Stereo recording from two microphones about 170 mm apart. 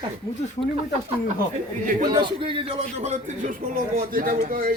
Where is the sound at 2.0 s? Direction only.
25° right (ahead or behind).